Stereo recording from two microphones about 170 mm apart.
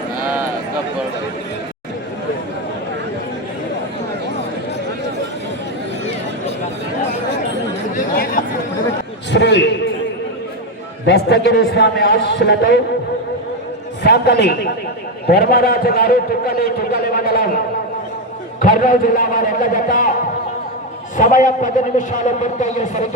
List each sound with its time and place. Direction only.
7.9 s chatter: 55° left (ahead or behind)
9.3 s a sound: 90° left
11.0 s a man's voice: 85° left
14.0 s a man's voice: 70° left (ahead or behind)
18.6 s a man's voice: 50° left (ahead or behind)
21.2 s a man's voice: 50° left (ahead or behind)